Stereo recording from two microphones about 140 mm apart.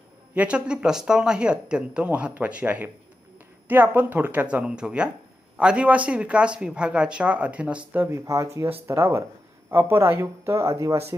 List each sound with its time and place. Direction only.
0.3 s speech: 10° right (ahead or behind)